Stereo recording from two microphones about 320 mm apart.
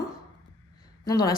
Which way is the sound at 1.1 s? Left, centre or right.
Centre.